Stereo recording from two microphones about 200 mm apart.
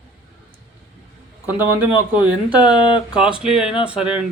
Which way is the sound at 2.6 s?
20° left (ahead or behind).